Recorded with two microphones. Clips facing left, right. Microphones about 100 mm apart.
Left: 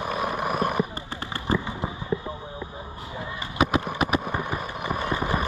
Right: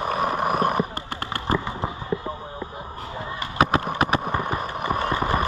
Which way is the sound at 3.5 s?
40° right (ahead or behind).